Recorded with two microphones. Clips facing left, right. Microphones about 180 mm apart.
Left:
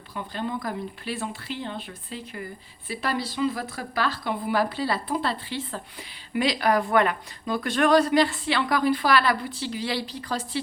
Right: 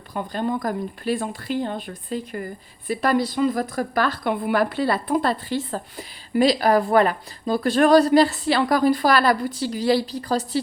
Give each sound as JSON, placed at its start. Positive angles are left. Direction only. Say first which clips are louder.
{"t": 0.1, "sound": "a woman's voice", "louder": "right 6 dB", "side_deg": -45}